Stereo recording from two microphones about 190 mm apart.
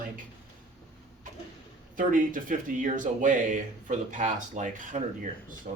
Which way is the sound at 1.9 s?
45° right (ahead or behind).